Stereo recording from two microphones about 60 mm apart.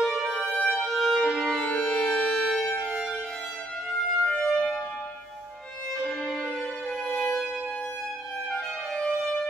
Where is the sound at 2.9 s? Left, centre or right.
Centre.